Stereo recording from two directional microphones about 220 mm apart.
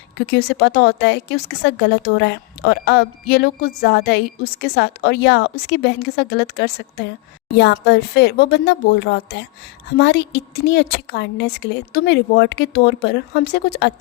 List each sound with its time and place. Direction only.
0.3 s a woman's voice: 45° left (ahead or behind)